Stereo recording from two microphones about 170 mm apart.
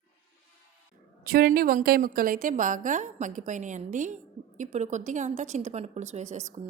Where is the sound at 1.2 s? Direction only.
60° right (ahead or behind).